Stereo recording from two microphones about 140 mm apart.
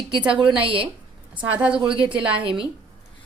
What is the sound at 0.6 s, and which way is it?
Speech, 40° right (ahead or behind).